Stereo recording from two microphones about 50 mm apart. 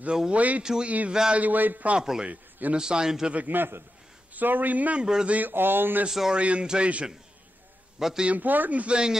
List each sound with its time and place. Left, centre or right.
0.3 s a man's voice: right
2.0 s a man's voice: centre
2.2 s a man's voice: right
2.8 s a man's voice: centre
3.4 s a man's voice: right
5.0 s a man's voice: centre
5.5 s speech: right
6.0 s a man's voice: centre
6.3 s speech: right
8.0 s a man's voice: centre
8.3 s speech: right; by 9.2 s centre